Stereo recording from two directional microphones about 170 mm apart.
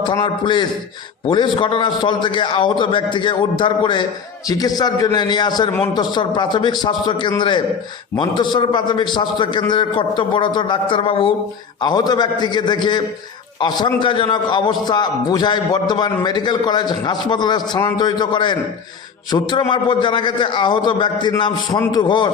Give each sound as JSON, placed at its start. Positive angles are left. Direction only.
{"t": 0.1, "sound": "a man's voice", "side_deg": 25}